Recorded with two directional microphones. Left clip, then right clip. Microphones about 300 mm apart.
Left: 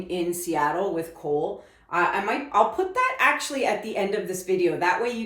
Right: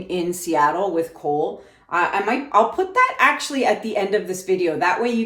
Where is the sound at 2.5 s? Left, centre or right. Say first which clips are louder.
Right 3 dB; right.